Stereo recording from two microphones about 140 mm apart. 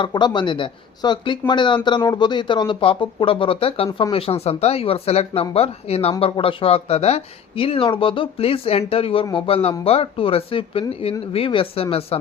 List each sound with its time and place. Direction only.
0.0 s speech: 30° left (ahead or behind)